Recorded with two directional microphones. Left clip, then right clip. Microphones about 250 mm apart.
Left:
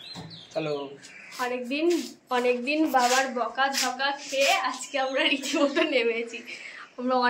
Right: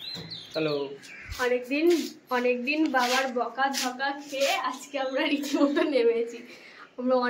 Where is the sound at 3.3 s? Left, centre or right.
Centre.